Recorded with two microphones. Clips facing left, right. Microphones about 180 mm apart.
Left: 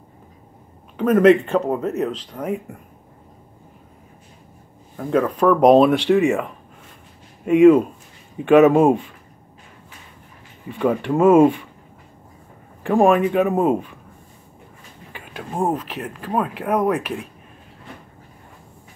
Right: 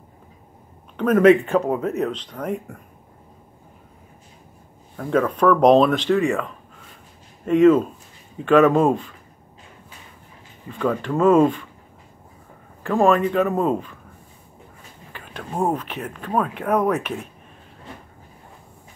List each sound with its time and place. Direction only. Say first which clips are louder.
0.9 s speech: left 1 dB; centre (ahead or behind)
4.9 s speech: left 1 dB; centre (ahead or behind)
10.7 s speech: left 3 dB; 15° left (ahead or behind)
12.8 s speech: left 2 dB; 15° left (ahead or behind)
15.1 s a sound: even; 15° left (ahead or behind)
15.6 s speech: left 1 dB; centre (ahead or behind)